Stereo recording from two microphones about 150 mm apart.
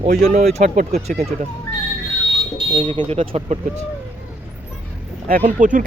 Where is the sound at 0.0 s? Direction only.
50° right (ahead or behind); by 1.2 s 65° right (ahead or behind).